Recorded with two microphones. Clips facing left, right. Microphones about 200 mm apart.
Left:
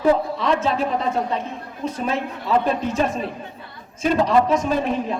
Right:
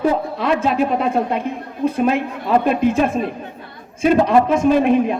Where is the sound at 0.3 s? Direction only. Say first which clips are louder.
Right 3 dB; 60° right (ahead or behind).